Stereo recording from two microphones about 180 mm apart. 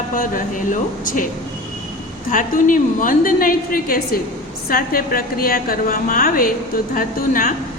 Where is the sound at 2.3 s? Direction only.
45° left (ahead or behind).